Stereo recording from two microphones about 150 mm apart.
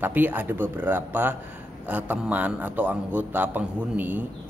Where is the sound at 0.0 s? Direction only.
10° right (ahead or behind).